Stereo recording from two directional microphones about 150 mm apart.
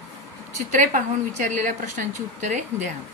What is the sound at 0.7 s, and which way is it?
A woman's voice, 55° right (ahead or behind).